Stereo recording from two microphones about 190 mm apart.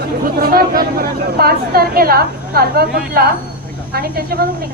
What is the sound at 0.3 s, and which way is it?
A woman's voice, 50° right (ahead or behind).